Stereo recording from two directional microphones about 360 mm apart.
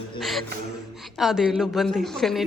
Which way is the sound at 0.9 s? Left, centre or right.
Centre.